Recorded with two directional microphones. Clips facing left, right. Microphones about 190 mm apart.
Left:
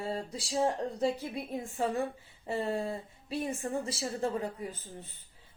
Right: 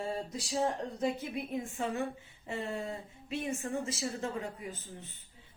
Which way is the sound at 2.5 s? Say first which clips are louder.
Left 4 dB; 35° left (ahead or behind).